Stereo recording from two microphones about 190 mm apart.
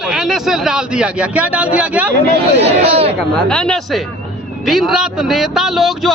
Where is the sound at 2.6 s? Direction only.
30° right (ahead or behind).